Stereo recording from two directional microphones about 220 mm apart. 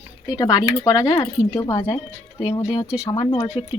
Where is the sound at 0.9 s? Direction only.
15° left (ahead or behind).